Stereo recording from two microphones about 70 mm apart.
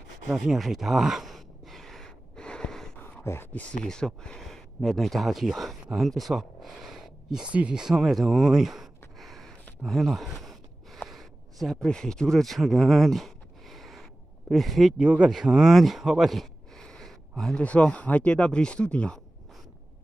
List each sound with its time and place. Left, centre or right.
0.3 s sigh: centre
3.0 s a sound: left
3.8 s speech: centre
7.5 s a sound: centre
14.5 s speech: centre
15.0 s speech: centre
15.2 s speech: centre
17.6 s speech: centre